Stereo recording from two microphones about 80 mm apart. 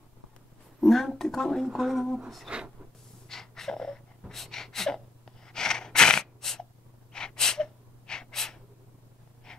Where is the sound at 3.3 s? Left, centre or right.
Centre.